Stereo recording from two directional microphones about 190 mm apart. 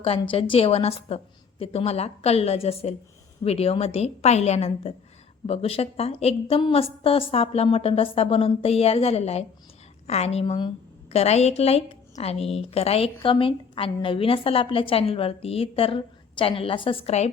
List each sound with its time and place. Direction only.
0.0 s a woman's voice: 30° left (ahead or behind)